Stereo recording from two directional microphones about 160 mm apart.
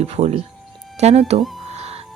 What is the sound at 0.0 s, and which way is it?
Speech, 40° right (ahead or behind).